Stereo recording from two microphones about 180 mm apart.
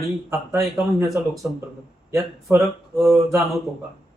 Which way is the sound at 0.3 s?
15° right (ahead or behind).